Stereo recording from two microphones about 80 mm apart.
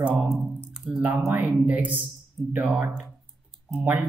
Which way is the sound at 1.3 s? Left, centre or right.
Right.